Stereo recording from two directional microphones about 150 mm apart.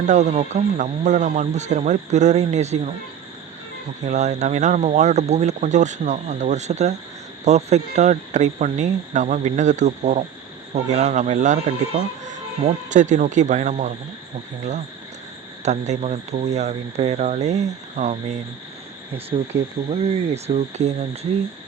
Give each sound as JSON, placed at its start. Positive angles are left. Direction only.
{"t": 0.1, "sound": "speech", "side_deg": -50}
{"t": 4.0, "sound": "speech", "side_deg": -50}
{"t": 15.6, "sound": "speech", "side_deg": -50}
{"t": 19.3, "sound": "speech", "side_deg": -30}
{"t": 19.9, "sound": "speech", "side_deg": -45}